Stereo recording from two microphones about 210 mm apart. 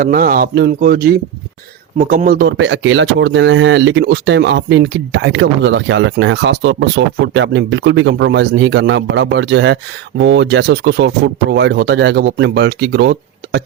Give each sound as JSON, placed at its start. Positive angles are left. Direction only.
{"t": 0.0, "sound": "speech", "side_deg": -45}